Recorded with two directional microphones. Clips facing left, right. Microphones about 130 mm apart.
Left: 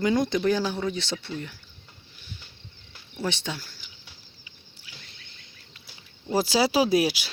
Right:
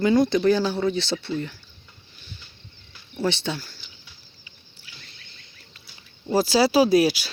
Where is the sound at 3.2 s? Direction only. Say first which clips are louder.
Right 5 dB; 10° left (ahead or behind).